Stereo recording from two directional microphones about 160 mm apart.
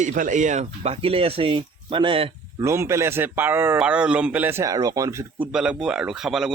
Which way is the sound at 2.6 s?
15° right (ahead or behind).